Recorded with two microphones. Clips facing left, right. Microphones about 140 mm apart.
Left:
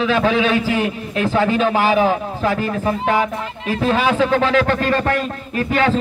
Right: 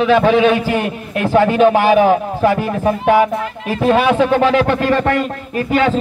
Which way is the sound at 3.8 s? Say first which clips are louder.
Right 4 dB; 60° right (ahead or behind).